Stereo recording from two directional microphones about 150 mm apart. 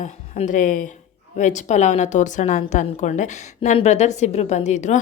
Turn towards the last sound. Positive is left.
turn(degrees=50)  # may be behind; listen again after turning